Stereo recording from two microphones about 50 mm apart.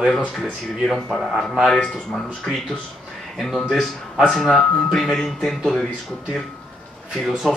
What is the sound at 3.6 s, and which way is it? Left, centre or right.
Speech, centre.